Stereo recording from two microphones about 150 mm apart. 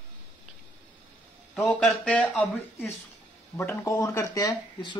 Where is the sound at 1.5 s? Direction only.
Centre (ahead or behind).